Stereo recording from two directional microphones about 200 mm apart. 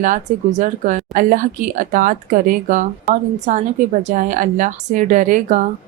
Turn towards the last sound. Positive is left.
turn(degrees=-40)  # may be behind; listen again after turning